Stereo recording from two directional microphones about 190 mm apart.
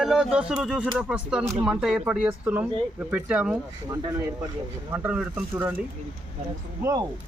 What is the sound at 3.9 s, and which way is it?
Speech, 15° right (ahead or behind).